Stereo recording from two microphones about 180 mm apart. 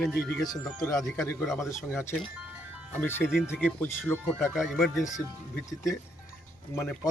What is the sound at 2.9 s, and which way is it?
Speech, 10° left (ahead or behind).